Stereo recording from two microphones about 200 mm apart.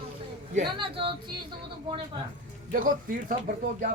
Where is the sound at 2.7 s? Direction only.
45° right (ahead or behind).